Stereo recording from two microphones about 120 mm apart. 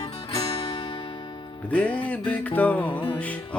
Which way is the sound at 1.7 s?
10° left (ahead or behind).